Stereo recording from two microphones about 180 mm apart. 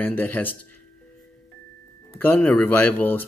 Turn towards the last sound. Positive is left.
turn(degrees=10)  # may be behind; listen again after turning